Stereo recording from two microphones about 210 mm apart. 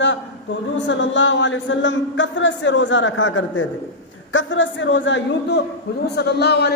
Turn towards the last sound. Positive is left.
turn(degrees=50)  # may be behind; listen again after turning